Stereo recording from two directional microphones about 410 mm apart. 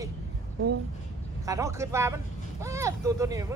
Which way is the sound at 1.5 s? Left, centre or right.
Centre.